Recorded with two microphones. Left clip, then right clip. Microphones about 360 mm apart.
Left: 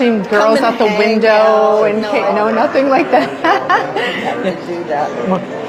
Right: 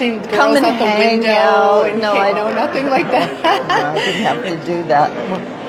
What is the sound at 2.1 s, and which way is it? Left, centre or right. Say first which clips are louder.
Speech: left 1 dB; left.